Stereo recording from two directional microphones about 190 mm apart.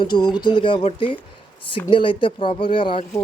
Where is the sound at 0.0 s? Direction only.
20° left (ahead or behind).